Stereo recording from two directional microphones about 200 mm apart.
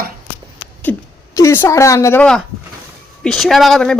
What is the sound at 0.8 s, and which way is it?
A woman's voice, 10° left (ahead or behind).